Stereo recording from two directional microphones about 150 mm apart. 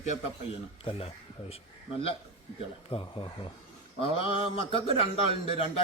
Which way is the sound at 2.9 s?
35° left (ahead or behind).